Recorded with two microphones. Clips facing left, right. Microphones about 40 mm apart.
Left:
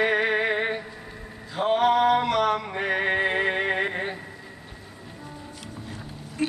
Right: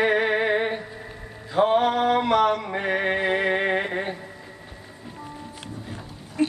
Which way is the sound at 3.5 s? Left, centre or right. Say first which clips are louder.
Right 2 dB; centre.